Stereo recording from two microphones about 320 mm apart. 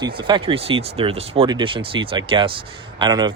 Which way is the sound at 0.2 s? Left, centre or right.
Centre.